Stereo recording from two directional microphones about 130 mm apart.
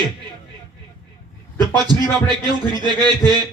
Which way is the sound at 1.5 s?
35° right (ahead or behind).